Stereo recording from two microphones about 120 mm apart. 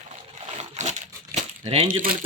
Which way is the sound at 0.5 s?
75° right (ahead or behind).